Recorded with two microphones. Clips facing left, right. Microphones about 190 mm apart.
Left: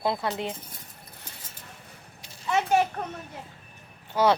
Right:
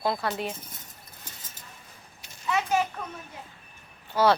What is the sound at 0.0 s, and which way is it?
Speech, 20° left (ahead or behind).